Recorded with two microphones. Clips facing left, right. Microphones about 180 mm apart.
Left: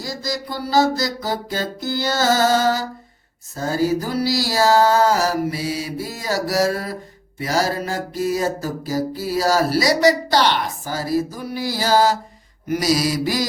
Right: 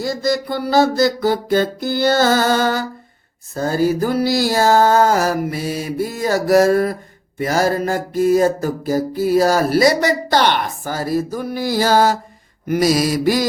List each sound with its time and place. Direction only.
0.0 s music: 60° right (ahead or behind)
3.5 s mantra: 55° right (ahead or behind)